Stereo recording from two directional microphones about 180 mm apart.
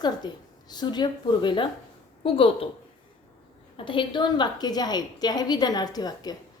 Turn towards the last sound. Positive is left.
turn(degrees=20)  # may be behind; listen again after turning